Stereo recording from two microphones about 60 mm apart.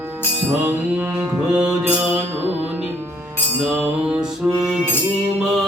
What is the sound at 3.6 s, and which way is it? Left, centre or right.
Music, right.